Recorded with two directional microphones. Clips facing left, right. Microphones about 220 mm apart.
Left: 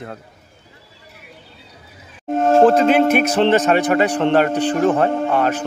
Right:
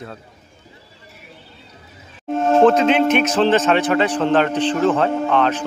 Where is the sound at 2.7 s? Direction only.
50° left (ahead or behind).